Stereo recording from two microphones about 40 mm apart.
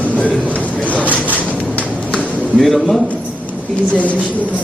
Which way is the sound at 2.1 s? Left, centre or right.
Centre.